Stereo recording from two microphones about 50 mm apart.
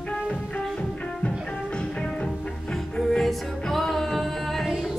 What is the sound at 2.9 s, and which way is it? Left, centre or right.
Music, centre.